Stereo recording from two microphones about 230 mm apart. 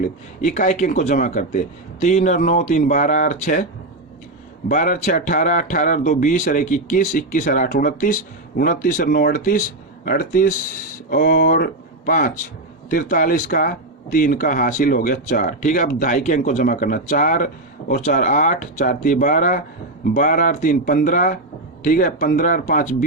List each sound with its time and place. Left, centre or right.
0.4 s speech: left
4.7 s speech: left